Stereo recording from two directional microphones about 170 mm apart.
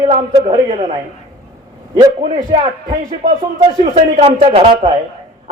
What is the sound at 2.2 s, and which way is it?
Speech, 40° right (ahead or behind).